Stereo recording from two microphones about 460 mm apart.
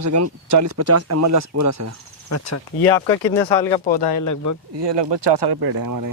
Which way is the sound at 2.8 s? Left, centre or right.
Centre.